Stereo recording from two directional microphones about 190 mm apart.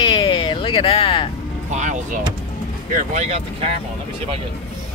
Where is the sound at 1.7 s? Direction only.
40° right (ahead or behind).